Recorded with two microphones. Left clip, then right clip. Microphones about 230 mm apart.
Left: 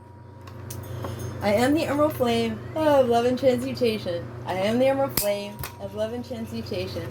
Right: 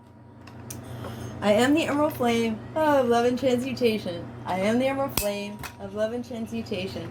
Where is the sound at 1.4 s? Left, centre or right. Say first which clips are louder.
Right 1 dB; right.